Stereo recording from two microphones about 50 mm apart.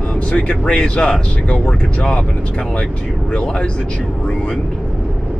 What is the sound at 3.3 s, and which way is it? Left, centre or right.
Speech, centre.